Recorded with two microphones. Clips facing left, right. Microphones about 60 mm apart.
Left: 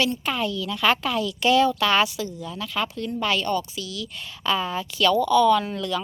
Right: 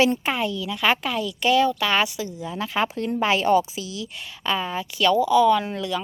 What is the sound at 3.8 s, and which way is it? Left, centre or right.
Speech, right.